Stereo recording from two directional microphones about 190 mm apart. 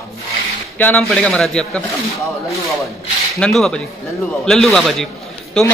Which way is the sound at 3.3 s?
5° left (ahead or behind).